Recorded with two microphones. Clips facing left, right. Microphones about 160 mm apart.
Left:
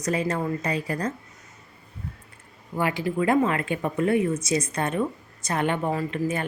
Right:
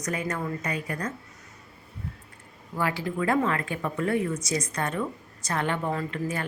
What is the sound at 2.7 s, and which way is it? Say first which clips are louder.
Speech: left 3 dB; 20° left (ahead or behind).